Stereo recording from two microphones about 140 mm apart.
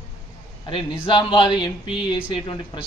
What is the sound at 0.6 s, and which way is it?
A man's voice, 35° left (ahead or behind).